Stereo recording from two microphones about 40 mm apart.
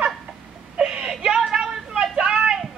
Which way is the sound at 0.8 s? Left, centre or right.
Right.